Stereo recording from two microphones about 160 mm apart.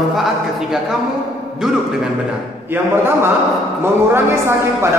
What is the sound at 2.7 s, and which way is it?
Speech, 15° right (ahead or behind).